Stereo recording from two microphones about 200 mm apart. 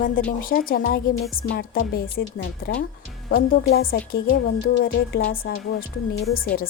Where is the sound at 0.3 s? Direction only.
45° left (ahead or behind).